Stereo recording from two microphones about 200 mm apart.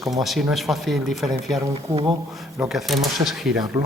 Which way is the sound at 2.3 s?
Centre (ahead or behind).